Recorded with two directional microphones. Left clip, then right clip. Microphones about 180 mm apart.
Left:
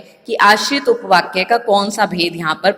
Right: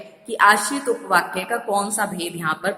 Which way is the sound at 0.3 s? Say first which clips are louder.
Left 4 dB; 30° left (ahead or behind).